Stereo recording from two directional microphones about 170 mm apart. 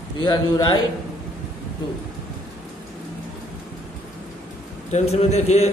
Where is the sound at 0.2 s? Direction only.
25° left (ahead or behind).